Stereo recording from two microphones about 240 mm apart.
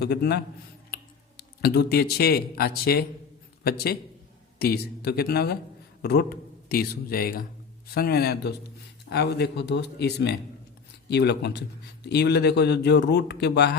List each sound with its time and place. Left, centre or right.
0.0 s speech: left